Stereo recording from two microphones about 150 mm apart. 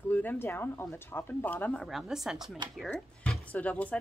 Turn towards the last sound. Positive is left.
turn(degrees=10)  # may be behind; listen again after turning